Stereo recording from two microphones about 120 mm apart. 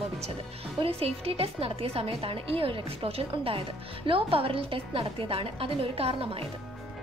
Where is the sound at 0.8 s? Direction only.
55° right (ahead or behind).